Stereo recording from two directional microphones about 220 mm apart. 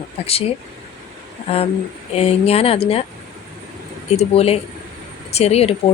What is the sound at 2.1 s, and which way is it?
Speech, 25° left (ahead or behind).